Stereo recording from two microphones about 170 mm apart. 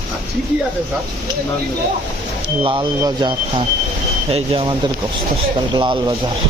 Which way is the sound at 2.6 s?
25° right (ahead or behind).